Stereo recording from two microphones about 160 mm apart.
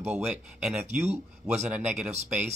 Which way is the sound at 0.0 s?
10° right (ahead or behind).